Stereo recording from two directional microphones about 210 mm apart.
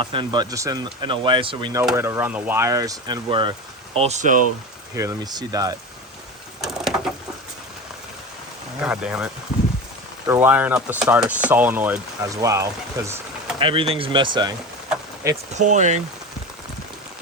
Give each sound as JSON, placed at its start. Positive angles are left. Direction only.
{"t": 0.0, "sound": "speech", "side_deg": -25}
{"t": 4.9, "sound": "speech", "side_deg": -15}
{"t": 6.6, "sound": "a sound", "side_deg": 0}
{"t": 8.8, "sound": "speech", "side_deg": -5}
{"t": 13.6, "sound": "speech", "side_deg": -25}
{"t": 15.5, "sound": "speech", "side_deg": -35}